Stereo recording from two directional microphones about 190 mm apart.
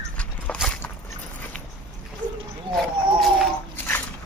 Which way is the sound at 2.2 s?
45° right (ahead or behind).